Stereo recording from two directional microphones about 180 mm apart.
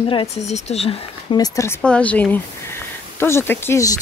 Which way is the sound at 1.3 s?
20° left (ahead or behind).